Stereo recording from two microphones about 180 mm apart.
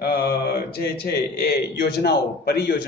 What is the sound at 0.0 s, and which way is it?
Mantra, 60° left (ahead or behind).